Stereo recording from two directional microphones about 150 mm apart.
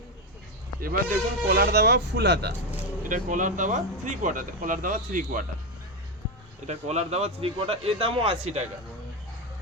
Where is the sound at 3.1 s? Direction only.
60° right (ahead or behind).